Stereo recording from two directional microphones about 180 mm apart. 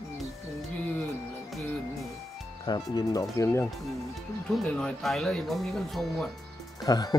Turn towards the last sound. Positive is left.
turn(degrees=20)  # may be behind; listen again after turning